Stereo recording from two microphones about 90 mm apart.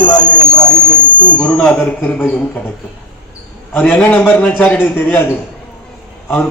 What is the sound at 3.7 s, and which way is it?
A man's voice, 10° left (ahead or behind).